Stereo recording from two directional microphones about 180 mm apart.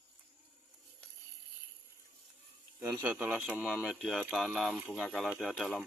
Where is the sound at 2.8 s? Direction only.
10° right (ahead or behind).